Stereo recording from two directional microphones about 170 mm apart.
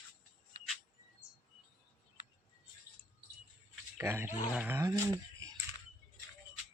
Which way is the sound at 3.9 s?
15° right (ahead or behind).